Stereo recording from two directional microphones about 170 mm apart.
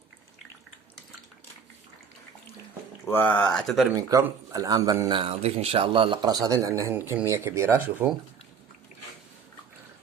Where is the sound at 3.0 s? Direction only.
10° left (ahead or behind).